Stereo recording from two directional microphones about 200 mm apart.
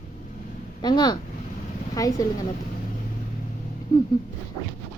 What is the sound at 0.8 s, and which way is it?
A woman's voice, 20° left (ahead or behind).